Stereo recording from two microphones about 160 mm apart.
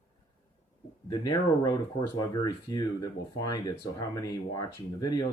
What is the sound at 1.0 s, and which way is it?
Speech, 25° left (ahead or behind).